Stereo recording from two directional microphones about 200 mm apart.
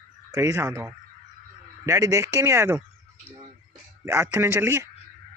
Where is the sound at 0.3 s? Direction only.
15° right (ahead or behind).